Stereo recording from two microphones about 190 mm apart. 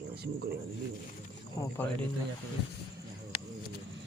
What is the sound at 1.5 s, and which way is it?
Speech, 10° left (ahead or behind).